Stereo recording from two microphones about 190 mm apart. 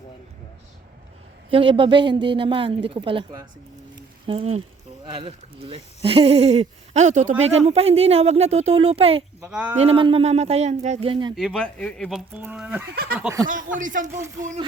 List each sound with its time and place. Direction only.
1.5 s a woman's voice: 30° right (ahead or behind)
3.9 s a sound: 30° right (ahead or behind)
5.0 s speech: 25° right (ahead or behind)
9.4 s speech: 5° right (ahead or behind)
9.7 s speech: 30° right (ahead or behind)
11.3 s speech: centre (ahead or behind)
13.7 s speech: 45° right (ahead or behind)